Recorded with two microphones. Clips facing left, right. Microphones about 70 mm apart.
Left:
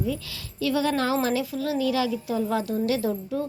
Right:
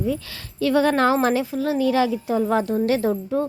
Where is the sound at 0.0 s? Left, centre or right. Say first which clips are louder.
Right 4 dB; right.